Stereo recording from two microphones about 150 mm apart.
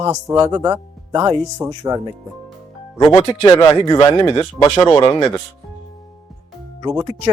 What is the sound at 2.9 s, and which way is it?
Speech, 30° left (ahead or behind).